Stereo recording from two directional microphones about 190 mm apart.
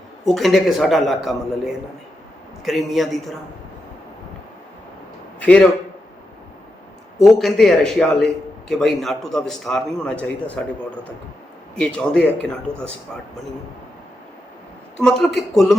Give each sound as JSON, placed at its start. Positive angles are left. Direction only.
{"t": 0.3, "sound": "a man's voice", "side_deg": 0}
{"t": 5.4, "sound": "a man's voice", "side_deg": 5}
{"t": 7.2, "sound": "a man's voice", "side_deg": 0}
{"t": 14.9, "sound": "a man's voice", "side_deg": 5}